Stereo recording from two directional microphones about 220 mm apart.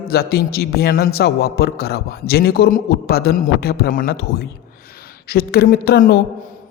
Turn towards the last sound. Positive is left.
turn(degrees=45)  # may be behind; listen again after turning